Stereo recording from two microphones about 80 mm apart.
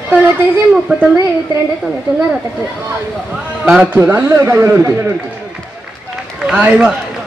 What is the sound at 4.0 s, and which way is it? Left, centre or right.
Speech, right.